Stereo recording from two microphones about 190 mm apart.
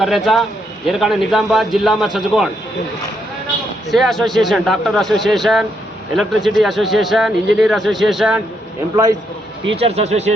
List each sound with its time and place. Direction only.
0.0 s a man's voice: centre (ahead or behind)
3.9 s a man's voice: centre (ahead or behind)
9.7 s speech: 30° right (ahead or behind)